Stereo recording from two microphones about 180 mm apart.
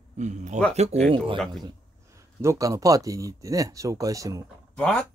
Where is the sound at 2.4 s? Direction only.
15° right (ahead or behind).